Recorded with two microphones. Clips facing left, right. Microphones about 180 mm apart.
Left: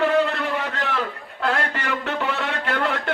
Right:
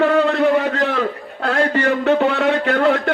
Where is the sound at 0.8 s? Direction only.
45° right (ahead or behind).